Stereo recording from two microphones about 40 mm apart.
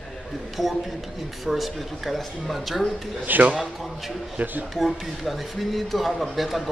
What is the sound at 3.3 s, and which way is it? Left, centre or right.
Speech, right.